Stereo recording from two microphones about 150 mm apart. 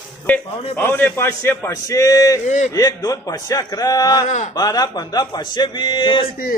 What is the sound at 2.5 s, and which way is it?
Speech, 55° left (ahead or behind).